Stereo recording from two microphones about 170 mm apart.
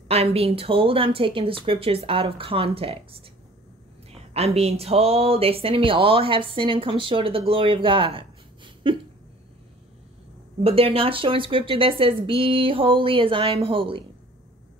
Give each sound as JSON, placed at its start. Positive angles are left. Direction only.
{"t": 0.1, "sound": "speech", "side_deg": -35}
{"t": 10.6, "sound": "speech", "side_deg": -35}